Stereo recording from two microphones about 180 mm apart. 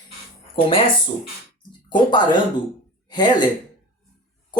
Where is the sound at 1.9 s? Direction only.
25° left (ahead or behind).